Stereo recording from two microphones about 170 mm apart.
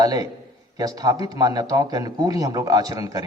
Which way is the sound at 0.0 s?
20° right (ahead or behind).